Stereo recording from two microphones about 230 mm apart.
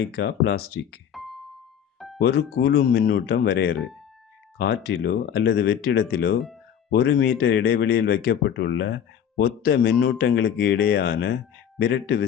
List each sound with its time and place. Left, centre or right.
0.0 s speech: left
1.1 s music: centre
2.2 s speech: left